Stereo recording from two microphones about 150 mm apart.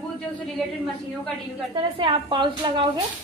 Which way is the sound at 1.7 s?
35° right (ahead or behind).